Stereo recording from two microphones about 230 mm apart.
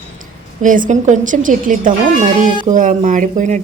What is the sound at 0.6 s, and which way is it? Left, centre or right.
Speech, right.